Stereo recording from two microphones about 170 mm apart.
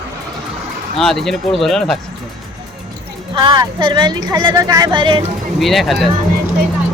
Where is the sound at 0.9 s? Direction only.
Centre (ahead or behind).